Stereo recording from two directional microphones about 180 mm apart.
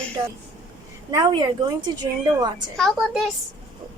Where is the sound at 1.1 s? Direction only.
25° right (ahead or behind).